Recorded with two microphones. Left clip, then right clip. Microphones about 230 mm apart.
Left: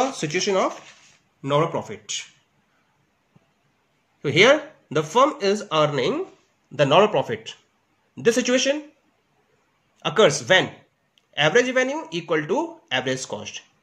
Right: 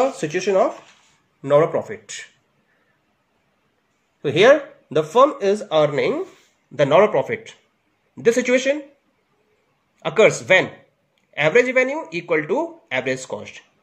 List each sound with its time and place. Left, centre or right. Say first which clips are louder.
0.0 s speech: right 3 dB; centre
1.6 s speech: right 5 dB; left
4.4 s a man's voice: right 3 dB; centre
10.0 s a man's voice: right 2 dB; centre